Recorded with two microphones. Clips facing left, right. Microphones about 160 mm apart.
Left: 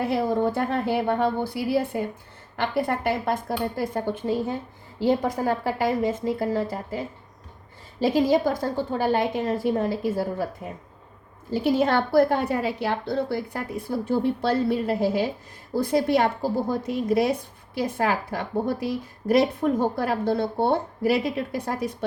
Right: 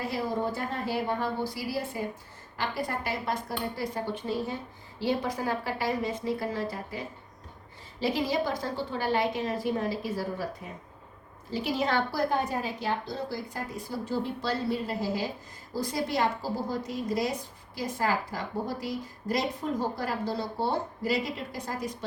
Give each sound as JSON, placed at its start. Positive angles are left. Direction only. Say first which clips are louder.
{"t": 0.0, "sound": "a woman's voice", "louder": "left 7 dB", "side_deg": 60}
{"t": 11.5, "sound": "a woman's voice", "louder": "left 7 dB", "side_deg": 50}